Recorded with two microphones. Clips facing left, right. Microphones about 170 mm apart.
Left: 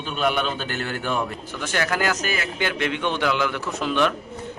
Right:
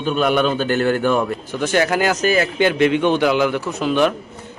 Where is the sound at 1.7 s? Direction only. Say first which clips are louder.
Right 6 dB; 20° right (ahead or behind).